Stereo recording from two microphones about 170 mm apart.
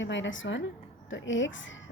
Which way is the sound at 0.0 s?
90° left.